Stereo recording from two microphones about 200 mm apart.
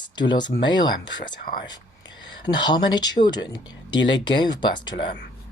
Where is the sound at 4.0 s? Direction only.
65° left (ahead or behind).